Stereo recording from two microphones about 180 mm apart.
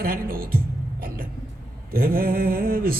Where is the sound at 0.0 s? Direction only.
55° right (ahead or behind).